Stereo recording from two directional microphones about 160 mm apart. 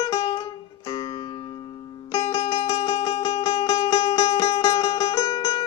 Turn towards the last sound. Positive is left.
turn(degrees=25)  # may be behind; listen again after turning